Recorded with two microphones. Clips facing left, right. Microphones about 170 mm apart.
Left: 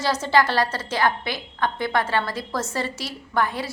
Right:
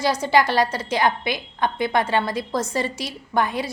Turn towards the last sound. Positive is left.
turn(degrees=-15)  # may be behind; listen again after turning